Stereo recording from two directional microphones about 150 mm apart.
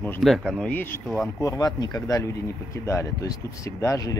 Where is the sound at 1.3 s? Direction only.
25° left (ahead or behind).